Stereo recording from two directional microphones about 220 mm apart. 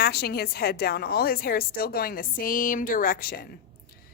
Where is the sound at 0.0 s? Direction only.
45° left (ahead or behind).